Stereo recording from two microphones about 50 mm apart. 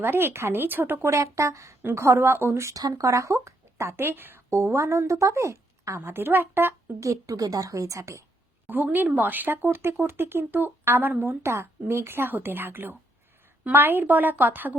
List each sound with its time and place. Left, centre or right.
0.0 s speech: right
1.0 s a woman's voice: right
2.1 s speech: right
2.6 s speech: right
6.1 s speech: right
7.0 s a woman's voice: right
8.6 s a woman's voice: right
11.4 s a woman's voice: right
12.3 s a woman's voice: right